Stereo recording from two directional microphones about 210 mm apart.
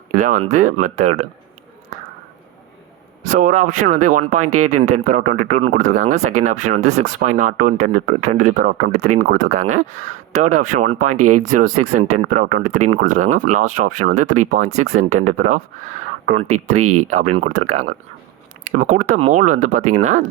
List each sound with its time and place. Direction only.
0.1 s speech: 40° right (ahead or behind)
3.2 s speech: 35° right (ahead or behind)
11.1 s speech: 90° right
12.1 s speech: 40° right (ahead or behind)
16.5 s speech: 90° right
16.9 s speech: 35° right (ahead or behind)